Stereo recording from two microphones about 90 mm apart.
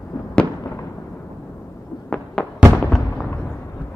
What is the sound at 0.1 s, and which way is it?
Fireworks, 50° left (ahead or behind).